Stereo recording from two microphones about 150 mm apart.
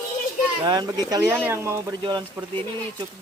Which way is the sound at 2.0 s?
30° right (ahead or behind).